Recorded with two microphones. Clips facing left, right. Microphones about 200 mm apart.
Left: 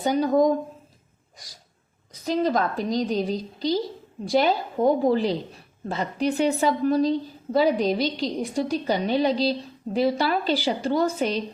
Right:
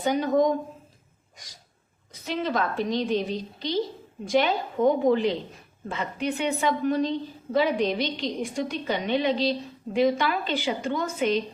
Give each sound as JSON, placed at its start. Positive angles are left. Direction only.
{"t": 0.0, "sound": "a woman's voice", "side_deg": 35}
{"t": 2.1, "sound": "a woman's voice", "side_deg": 40}